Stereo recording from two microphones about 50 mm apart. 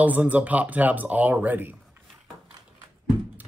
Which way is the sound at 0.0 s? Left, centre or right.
Right.